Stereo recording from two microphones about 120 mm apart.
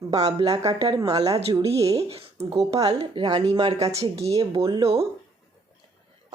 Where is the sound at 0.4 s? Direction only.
30° right (ahead or behind).